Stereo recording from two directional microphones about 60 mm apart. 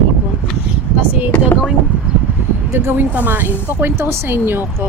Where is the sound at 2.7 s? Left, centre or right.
Right.